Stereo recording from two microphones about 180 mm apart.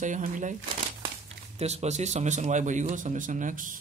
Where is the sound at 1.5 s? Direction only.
35° right (ahead or behind).